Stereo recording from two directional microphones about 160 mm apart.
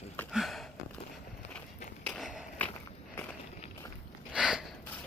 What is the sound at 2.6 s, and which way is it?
Walk, 10° left (ahead or behind).